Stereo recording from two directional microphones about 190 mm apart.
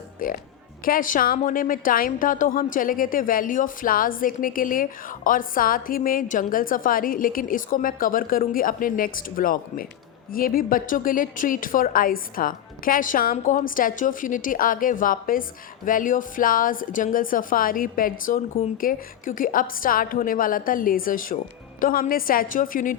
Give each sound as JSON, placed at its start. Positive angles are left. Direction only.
{"t": 0.2, "sound": "a woman's voice", "side_deg": 45}